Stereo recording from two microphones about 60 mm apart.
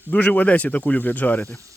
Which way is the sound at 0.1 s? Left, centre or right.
Left.